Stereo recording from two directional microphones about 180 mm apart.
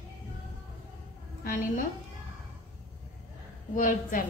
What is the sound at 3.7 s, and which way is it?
Speech, 45° left (ahead or behind).